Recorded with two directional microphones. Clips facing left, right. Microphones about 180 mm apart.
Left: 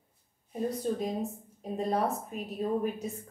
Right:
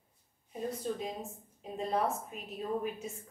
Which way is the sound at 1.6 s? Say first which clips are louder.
Left 3 dB; 40° left (ahead or behind).